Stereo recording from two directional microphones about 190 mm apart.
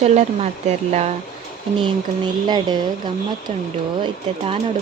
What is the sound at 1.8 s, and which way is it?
Speech, 25° right (ahead or behind).